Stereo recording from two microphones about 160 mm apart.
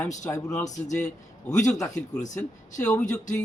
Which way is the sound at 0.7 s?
45° left (ahead or behind).